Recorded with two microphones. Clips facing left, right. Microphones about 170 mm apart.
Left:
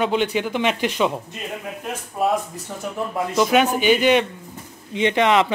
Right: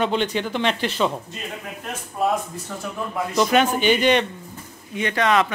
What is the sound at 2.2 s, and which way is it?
Speech, 5° left (ahead or behind).